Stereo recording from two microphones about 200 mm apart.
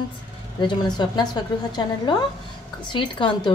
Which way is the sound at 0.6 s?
20° left (ahead or behind).